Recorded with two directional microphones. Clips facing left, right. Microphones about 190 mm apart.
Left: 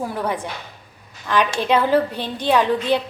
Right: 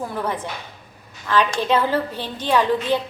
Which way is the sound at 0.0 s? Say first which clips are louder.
Left 1 dB; 10° left (ahead or behind).